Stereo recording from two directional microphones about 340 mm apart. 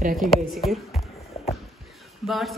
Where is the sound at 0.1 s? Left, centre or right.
Centre.